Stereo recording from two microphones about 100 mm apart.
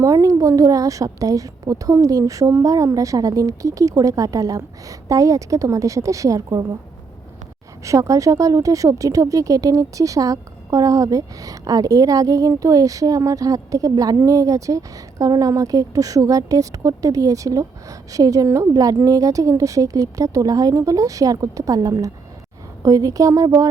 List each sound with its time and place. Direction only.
0.0 s speech: 35° right (ahead or behind)
7.9 s speech: 35° right (ahead or behind)